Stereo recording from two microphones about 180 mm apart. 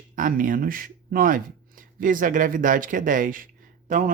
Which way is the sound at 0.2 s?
50° right (ahead or behind).